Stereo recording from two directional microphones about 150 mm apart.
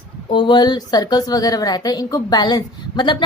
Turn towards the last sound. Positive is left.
turn(degrees=30)  # may be behind; listen again after turning